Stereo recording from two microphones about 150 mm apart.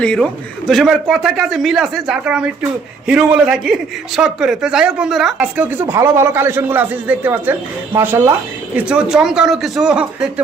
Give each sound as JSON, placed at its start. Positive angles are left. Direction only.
{"t": 0.0, "sound": "a man's voice", "side_deg": 5}